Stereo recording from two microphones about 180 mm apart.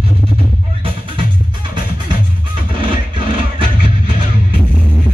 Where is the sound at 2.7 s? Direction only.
30° right (ahead or behind).